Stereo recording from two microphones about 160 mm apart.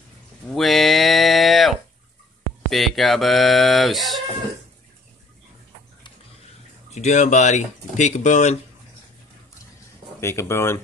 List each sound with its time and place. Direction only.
0.5 s a sound: centre (ahead or behind)
2.7 s speech: centre (ahead or behind)
6.9 s speech: 45° left (ahead or behind)
10.2 s speech: 15° left (ahead or behind)